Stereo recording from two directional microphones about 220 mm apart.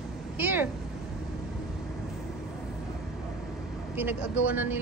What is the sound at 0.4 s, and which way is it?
Vehicle, 10° right (ahead or behind).